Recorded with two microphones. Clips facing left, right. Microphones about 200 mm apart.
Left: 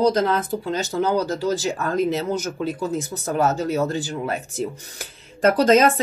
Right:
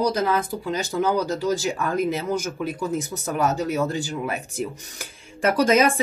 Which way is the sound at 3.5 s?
15° right (ahead or behind).